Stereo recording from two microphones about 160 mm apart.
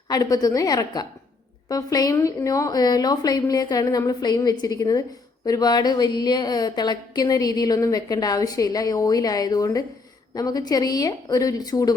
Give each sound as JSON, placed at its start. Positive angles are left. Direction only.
{"t": 0.1, "sound": "a woman's voice", "side_deg": 25}